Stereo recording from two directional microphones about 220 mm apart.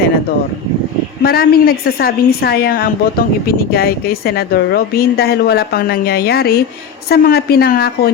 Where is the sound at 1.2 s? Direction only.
45° left (ahead or behind).